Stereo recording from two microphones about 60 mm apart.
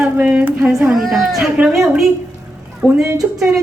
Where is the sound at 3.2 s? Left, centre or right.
Right.